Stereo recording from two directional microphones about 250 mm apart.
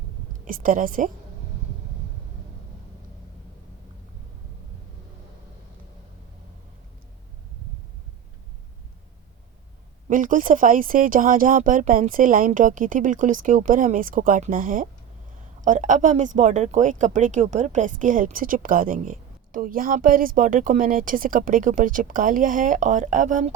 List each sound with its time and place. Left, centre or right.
0.4 s speech: right
10.1 s speech: right